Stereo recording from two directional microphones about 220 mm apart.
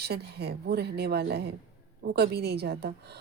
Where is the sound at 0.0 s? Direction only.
45° right (ahead or behind).